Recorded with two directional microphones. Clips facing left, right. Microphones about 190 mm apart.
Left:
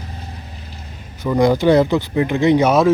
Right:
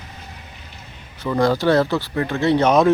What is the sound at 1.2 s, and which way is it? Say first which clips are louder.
Speech: left 3 dB; 15° left (ahead or behind).